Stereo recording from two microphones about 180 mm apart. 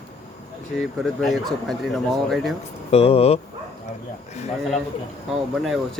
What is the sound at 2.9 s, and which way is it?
Speech, 35° left (ahead or behind).